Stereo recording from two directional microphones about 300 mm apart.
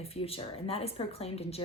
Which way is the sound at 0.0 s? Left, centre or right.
Centre.